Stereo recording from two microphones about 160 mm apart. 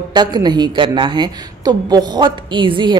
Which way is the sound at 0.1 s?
25° right (ahead or behind).